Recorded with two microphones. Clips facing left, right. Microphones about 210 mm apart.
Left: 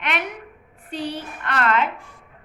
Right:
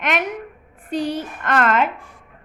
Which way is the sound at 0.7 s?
45° right (ahead or behind).